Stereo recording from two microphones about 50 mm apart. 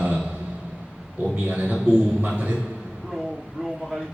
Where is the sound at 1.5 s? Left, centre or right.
Right.